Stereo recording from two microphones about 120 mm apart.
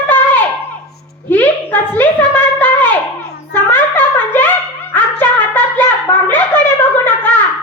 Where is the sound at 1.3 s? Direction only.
15° left (ahead or behind).